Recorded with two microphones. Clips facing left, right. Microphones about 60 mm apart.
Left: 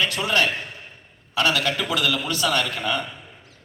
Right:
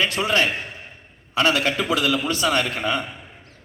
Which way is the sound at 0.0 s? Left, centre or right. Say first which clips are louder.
Right 1 dB; right.